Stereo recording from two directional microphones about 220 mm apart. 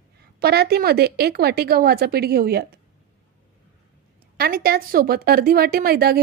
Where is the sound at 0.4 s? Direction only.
45° right (ahead or behind).